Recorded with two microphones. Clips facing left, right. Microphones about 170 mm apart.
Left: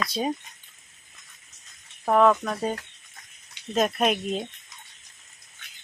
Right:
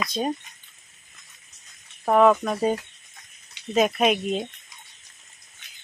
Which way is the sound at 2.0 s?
5° right (ahead or behind).